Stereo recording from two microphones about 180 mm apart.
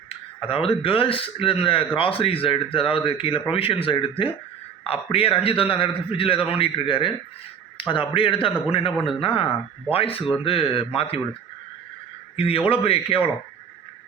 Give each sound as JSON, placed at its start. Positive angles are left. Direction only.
{"t": 0.1, "sound": "a man's voice", "side_deg": 30}
{"t": 12.4, "sound": "speech", "side_deg": 30}